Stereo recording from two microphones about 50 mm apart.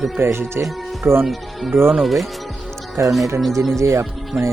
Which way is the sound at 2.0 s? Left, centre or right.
Centre.